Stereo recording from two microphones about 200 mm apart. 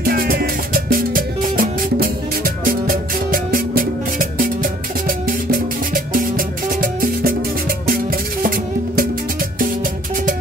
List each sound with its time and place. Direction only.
0.0 s music: 50° right (ahead or behind)